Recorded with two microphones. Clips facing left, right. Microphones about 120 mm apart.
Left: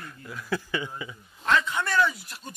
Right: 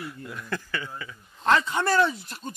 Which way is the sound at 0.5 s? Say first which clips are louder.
Left 4 dB; 15° left (ahead or behind).